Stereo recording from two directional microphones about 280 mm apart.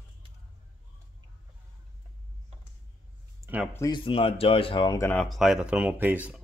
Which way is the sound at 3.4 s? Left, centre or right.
Centre.